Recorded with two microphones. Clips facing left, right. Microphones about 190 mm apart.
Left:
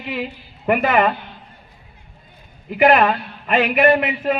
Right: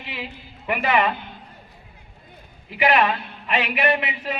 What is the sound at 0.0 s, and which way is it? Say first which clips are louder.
A woman's voice: left 8 dB; 50° left (ahead or behind).